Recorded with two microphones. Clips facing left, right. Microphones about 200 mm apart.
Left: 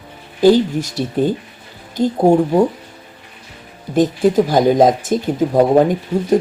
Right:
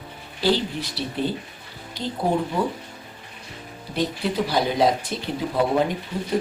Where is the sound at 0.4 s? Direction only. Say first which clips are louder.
Left 11 dB; 45° left (ahead or behind).